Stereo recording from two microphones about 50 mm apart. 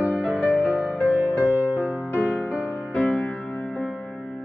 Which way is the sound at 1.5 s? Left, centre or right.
Right.